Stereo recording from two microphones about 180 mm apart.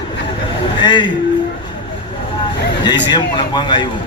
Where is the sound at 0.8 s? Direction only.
25° left (ahead or behind).